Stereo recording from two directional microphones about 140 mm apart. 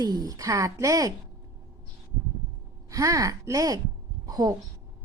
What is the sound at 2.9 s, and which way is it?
A woman's voice, 25° right (ahead or behind).